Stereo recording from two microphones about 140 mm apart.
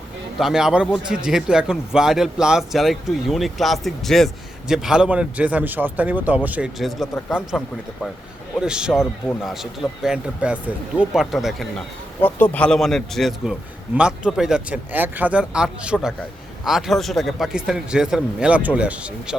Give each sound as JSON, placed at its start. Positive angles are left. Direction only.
{"t": 0.3, "sound": "a man's voice", "side_deg": -5}